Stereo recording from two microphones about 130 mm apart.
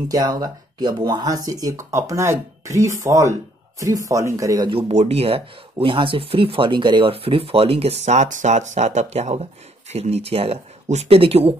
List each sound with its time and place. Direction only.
0.1 s speech: 30° right (ahead or behind)
4.6 s speech: 45° right (ahead or behind)